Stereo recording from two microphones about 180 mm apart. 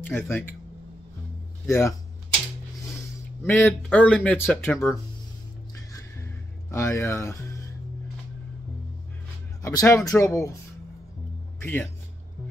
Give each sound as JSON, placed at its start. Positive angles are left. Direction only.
{"t": 0.0, "sound": "speech", "side_deg": 10}
{"t": 1.7, "sound": "speech", "side_deg": 15}
{"t": 3.4, "sound": "speech", "side_deg": 10}
{"t": 5.9, "sound": "music", "side_deg": 15}
{"t": 9.6, "sound": "speech", "side_deg": 20}
{"t": 11.6, "sound": "speech", "side_deg": 10}